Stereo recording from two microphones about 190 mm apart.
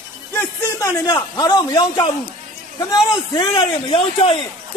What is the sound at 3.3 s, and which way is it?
A man's voice, 25° left (ahead or behind).